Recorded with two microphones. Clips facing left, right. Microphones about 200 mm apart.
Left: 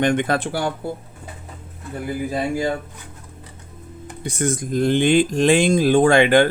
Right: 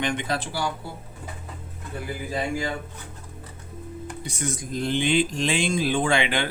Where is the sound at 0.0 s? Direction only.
50° left (ahead or behind).